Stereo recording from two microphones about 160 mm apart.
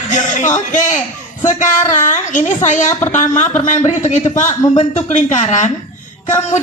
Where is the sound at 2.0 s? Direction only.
50° left (ahead or behind).